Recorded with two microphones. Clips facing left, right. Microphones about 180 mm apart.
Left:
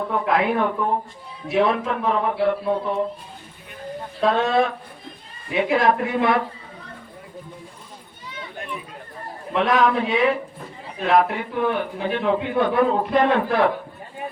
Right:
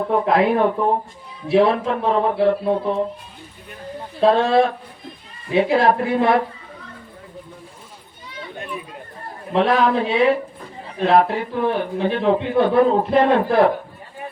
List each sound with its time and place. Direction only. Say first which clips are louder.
0.3 s a man's voice: right 3 dB; 35° right (ahead or behind)
4.2 s a man's voice: right 4 dB; 30° right (ahead or behind)
9.5 s a man's voice: right 2 dB; 30° right (ahead or behind)